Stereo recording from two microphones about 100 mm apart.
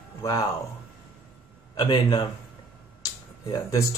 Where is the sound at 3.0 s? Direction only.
35° left (ahead or behind).